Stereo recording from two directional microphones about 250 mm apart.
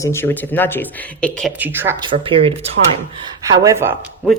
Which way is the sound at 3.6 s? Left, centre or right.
Centre.